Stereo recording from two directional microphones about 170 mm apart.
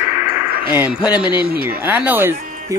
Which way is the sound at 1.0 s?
5° right (ahead or behind).